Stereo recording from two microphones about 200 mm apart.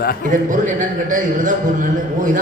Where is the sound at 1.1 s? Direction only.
40° right (ahead or behind).